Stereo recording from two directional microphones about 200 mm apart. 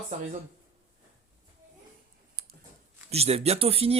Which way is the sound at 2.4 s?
50° right (ahead or behind).